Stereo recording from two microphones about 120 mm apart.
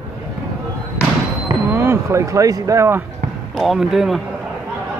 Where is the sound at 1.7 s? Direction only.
20° right (ahead or behind).